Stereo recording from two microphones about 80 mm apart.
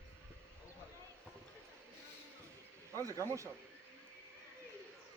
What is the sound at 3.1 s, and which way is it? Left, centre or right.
Speech, right.